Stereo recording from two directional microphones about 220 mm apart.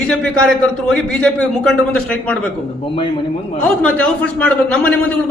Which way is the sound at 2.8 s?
25° left (ahead or behind).